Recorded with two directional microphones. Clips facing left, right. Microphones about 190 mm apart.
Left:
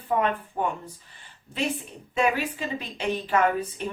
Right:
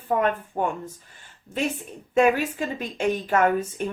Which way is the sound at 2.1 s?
45° right (ahead or behind).